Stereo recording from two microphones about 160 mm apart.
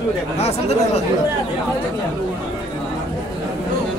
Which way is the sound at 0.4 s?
40° left (ahead or behind).